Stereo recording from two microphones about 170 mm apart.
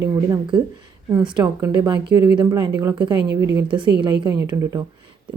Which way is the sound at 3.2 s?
80° right.